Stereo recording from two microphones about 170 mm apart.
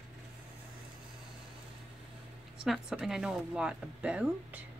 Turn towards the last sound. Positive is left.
turn(degrees=-5)  # may be behind; listen again after turning